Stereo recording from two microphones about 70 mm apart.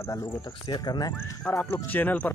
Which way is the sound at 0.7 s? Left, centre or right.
Left.